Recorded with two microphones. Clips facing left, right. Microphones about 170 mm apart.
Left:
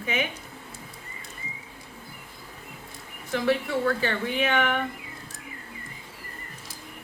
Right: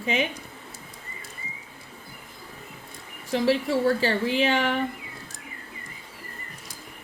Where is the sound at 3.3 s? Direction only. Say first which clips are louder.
Right 2 dB; 30° right (ahead or behind).